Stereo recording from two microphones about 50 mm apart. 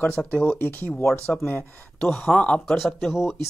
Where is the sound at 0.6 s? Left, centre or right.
Left.